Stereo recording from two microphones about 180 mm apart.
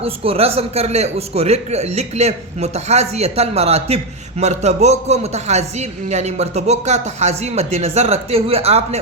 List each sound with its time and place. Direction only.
0.0 s a man's voice: 35° right (ahead or behind)